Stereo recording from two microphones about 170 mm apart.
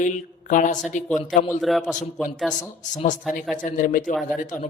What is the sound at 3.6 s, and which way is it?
Speech, 50° left (ahead or behind).